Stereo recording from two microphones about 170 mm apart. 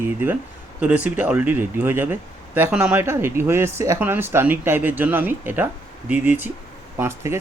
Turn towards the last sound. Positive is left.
turn(degrees=-15)  # may be behind; listen again after turning